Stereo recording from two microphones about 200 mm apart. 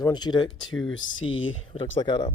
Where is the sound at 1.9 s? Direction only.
20° left (ahead or behind).